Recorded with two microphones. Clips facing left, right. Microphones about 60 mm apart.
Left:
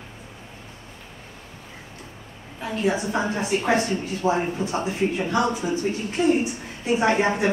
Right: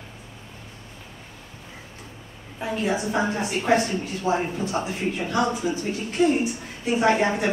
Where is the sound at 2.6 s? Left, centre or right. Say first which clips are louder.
Left 2 dB; centre.